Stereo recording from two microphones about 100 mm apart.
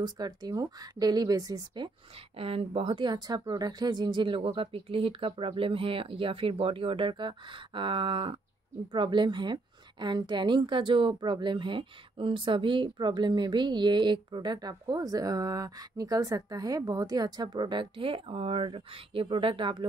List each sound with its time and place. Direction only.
0.0 s speech: 45° right (ahead or behind)
1.8 s a woman's voice: 50° right (ahead or behind)
2.3 s a woman's voice: 70° right (ahead or behind); by 19.9 s 55° right (ahead or behind)